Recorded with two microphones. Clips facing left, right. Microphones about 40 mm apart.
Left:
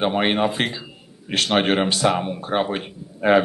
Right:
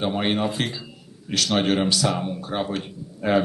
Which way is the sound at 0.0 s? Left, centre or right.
Left.